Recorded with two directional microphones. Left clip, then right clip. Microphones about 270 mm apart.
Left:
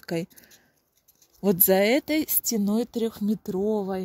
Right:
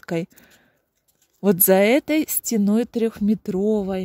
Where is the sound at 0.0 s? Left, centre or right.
Centre.